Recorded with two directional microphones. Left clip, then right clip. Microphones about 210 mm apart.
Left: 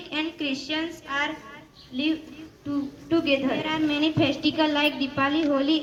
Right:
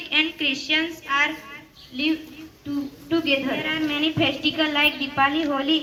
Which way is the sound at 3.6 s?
60° left (ahead or behind).